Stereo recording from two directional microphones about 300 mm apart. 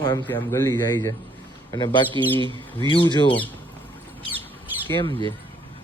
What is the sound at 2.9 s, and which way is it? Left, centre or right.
Speech, centre.